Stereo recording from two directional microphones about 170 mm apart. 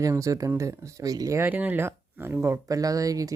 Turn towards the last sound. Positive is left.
turn(degrees=-20)  # may be behind; listen again after turning